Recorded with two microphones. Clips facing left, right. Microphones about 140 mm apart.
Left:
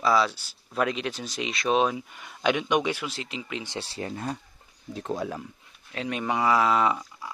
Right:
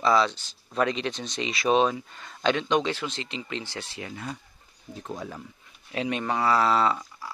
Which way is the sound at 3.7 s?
35° left (ahead or behind).